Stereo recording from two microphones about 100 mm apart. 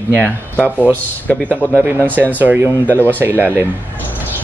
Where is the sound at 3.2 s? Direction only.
25° right (ahead or behind).